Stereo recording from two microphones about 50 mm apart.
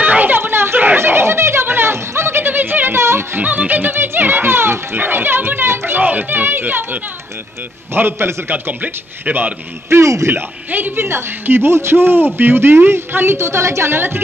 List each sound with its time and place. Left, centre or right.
0.0 s a sound: right
2.4 s a sound: right
3.0 s music: right
3.3 s music: right
7.9 s a woman's voice: right
8.8 s speech: right
9.8 s speech: right
10.3 s a woman's voice: right
13.9 s a woman's voice: right